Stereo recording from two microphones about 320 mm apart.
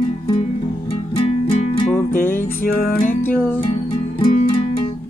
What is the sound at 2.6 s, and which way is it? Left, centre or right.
Music, left.